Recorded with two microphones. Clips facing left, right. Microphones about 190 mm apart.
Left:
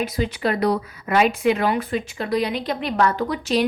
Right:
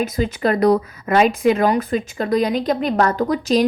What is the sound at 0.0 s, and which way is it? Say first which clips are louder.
A woman's voice: right 3 dB; 45° right (ahead or behind).